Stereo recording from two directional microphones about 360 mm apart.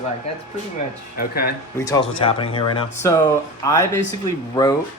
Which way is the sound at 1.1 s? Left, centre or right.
Left.